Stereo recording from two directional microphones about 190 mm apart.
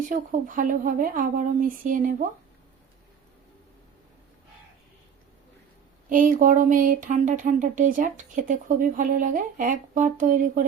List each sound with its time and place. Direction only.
0.1 s speech: 45° right (ahead or behind)
6.1 s speech: 45° right (ahead or behind)